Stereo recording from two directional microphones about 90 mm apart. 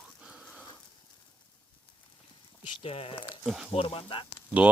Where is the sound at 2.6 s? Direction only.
90° left.